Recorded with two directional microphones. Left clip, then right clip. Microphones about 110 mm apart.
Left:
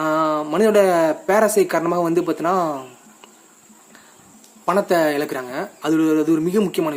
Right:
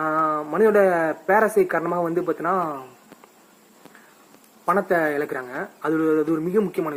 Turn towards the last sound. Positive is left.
turn(degrees=10)  # may be behind; listen again after turning